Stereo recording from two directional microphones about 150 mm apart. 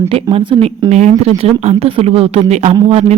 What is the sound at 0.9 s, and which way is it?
A woman's voice, 50° right (ahead or behind).